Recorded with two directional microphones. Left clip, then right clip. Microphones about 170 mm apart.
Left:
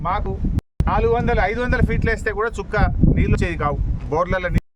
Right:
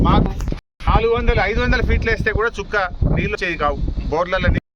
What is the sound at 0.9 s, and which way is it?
Speech, 15° left (ahead or behind).